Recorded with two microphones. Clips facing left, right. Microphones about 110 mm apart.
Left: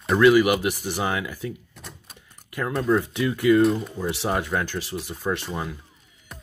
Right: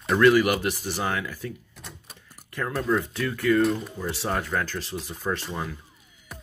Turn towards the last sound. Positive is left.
turn(degrees=0)  # may be behind; listen again after turning